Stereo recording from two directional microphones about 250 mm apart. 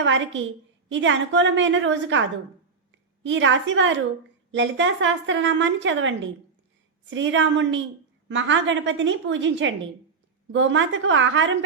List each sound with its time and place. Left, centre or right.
0.0 s a woman's voice: right
3.2 s a woman's voice: right